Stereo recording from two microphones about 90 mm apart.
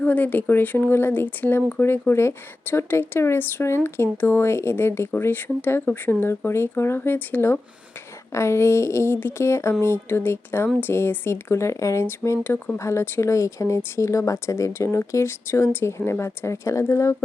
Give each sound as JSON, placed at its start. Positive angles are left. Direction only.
{"t": 0.0, "sound": "speech", "side_deg": 20}
{"t": 12.8, "sound": "speech", "side_deg": 30}